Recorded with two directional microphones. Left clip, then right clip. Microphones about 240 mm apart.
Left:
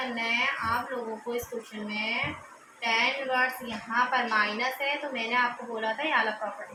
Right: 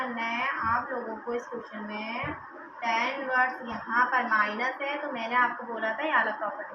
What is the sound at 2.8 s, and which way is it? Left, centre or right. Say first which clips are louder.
A woman's voice: left 2 dB; left.